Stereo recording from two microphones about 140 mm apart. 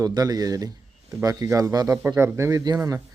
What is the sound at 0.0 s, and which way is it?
A man's voice, 25° right (ahead or behind).